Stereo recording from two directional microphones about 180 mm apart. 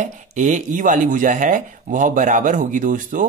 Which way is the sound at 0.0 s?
45° right (ahead or behind).